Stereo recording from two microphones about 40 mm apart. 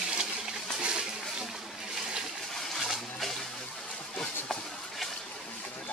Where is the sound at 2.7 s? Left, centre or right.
Centre.